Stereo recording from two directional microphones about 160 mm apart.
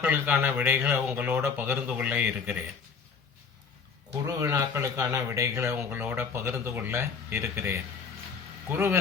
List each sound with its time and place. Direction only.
0.0 s speech: 10° right (ahead or behind)
4.3 s speech: 20° right (ahead or behind)